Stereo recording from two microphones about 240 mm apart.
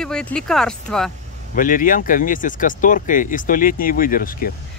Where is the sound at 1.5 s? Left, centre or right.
Left.